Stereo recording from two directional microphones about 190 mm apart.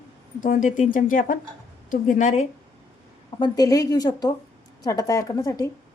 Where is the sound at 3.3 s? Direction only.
20° left (ahead or behind).